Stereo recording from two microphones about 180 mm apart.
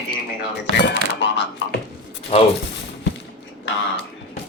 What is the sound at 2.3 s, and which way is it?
Speech, 35° left (ahead or behind).